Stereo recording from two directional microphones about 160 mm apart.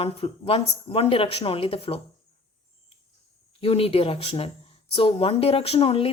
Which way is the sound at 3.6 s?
35° left (ahead or behind).